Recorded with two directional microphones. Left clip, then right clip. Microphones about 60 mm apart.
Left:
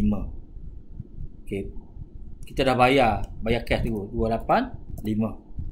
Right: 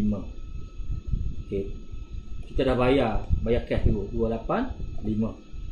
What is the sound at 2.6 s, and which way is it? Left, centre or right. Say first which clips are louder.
Speech: left 4 dB; left.